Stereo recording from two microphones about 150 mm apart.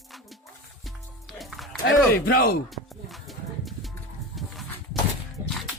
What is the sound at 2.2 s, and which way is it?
Speech, 90° left.